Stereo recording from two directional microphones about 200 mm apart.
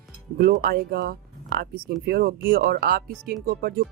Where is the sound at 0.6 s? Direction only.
50° right (ahead or behind).